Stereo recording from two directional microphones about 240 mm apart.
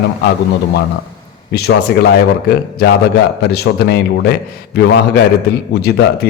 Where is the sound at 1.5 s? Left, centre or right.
Left.